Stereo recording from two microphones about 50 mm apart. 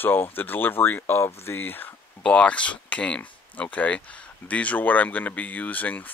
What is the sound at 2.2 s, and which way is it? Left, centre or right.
Speech, left.